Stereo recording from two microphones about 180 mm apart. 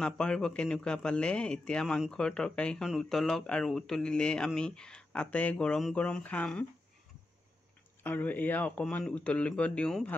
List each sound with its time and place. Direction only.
0.0 s a man's voice: 5° left (ahead or behind)
8.0 s speech: 10° left (ahead or behind)